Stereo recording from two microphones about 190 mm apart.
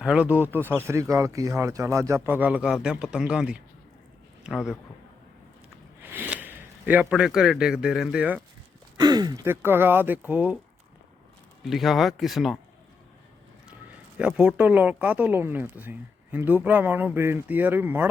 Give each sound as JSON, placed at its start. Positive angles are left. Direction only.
{"t": 0.0, "sound": "a man's voice", "side_deg": -5}
{"t": 6.0, "sound": "speech", "side_deg": -10}
{"t": 9.0, "sound": "a sound", "side_deg": -20}
{"t": 9.6, "sound": "speech", "side_deg": -10}
{"t": 11.6, "sound": "speech", "side_deg": 0}
{"t": 14.2, "sound": "speech", "side_deg": -5}